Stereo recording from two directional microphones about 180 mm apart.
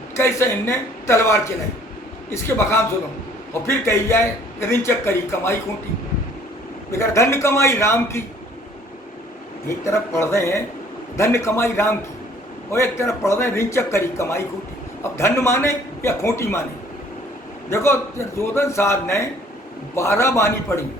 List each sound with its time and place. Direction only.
0.2 s speech: 15° left (ahead or behind)
6.9 s speech: 15° left (ahead or behind)
9.6 s speech: 15° left (ahead or behind)
17.7 s speech: 15° left (ahead or behind)